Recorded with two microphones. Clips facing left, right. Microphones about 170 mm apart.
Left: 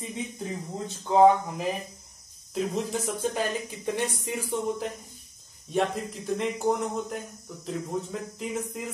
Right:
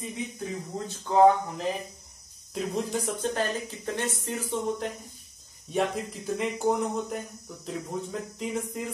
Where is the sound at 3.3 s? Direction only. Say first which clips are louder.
Even; 15° left (ahead or behind).